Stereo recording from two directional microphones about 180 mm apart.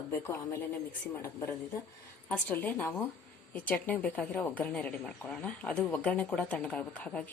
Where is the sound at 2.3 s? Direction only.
10° left (ahead or behind).